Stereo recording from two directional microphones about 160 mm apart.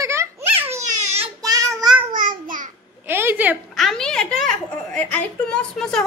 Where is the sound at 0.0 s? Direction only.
20° right (ahead or behind).